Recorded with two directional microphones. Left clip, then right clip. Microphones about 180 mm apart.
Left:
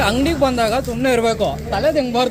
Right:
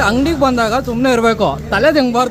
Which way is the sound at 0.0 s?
25° right (ahead or behind).